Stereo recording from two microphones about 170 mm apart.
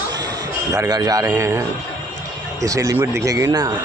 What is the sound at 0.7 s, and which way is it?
Speech, 20° right (ahead or behind).